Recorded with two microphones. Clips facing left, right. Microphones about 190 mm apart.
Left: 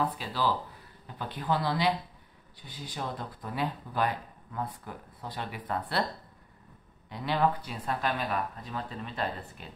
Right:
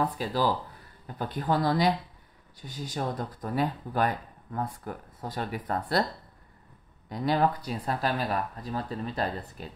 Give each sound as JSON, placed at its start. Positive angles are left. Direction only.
{"t": 0.2, "sound": "speech", "side_deg": -45}
{"t": 7.1, "sound": "speech", "side_deg": -40}